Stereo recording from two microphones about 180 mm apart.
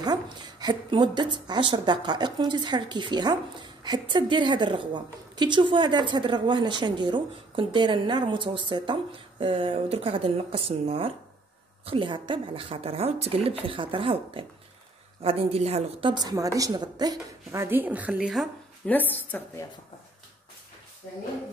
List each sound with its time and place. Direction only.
0.0 s a woman's voice: 20° right (ahead or behind); by 18.5 s centre (ahead or behind)
18.9 s speech: 10° left (ahead or behind)